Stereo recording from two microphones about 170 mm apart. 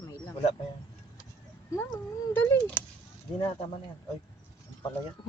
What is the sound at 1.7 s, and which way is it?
Cat, 15° left (ahead or behind).